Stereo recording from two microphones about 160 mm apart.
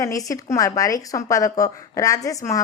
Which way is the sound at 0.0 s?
20° left (ahead or behind).